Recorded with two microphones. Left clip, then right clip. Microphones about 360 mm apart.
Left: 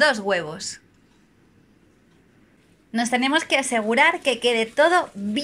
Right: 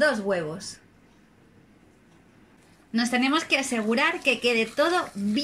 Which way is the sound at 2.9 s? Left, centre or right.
Centre.